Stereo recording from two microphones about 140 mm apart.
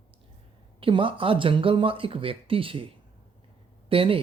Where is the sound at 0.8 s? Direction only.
40° right (ahead or behind).